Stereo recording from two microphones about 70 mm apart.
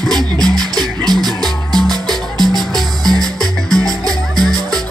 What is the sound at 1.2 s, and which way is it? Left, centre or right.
Music, centre.